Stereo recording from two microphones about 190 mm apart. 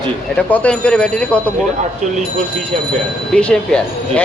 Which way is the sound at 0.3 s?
5° left (ahead or behind).